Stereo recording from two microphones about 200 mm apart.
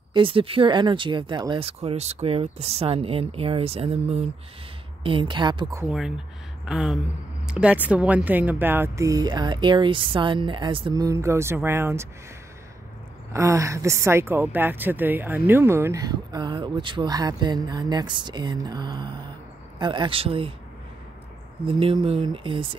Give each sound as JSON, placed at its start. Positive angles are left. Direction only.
{"t": 0.1, "sound": "a woman's voice", "side_deg": -25}
{"t": 5.9, "sound": "a sound", "side_deg": -5}
{"t": 7.4, "sound": "speech", "side_deg": -5}
{"t": 13.3, "sound": "a woman's voice", "side_deg": -15}
{"t": 21.6, "sound": "a woman's voice", "side_deg": -30}